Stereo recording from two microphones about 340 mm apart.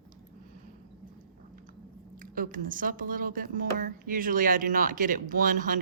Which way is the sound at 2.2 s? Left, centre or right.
Right.